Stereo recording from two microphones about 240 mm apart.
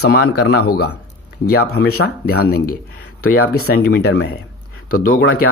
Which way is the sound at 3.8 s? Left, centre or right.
Left.